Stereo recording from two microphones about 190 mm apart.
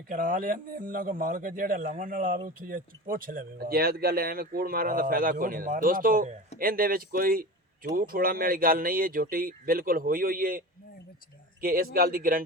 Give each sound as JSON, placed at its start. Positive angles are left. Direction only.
{"t": 0.1, "sound": "speech", "side_deg": -45}
{"t": 11.6, "sound": "speech", "side_deg": -50}